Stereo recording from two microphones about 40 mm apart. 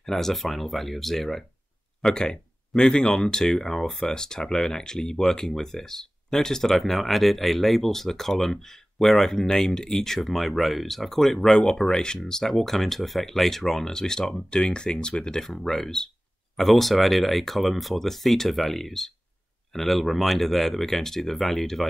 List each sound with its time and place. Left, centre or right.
0.0 s speech: centre
2.0 s speech: centre